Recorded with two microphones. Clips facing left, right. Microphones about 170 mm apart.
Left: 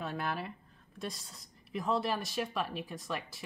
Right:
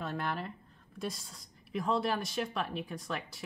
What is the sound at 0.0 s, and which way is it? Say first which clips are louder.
Speech: even; 10° left (ahead or behind).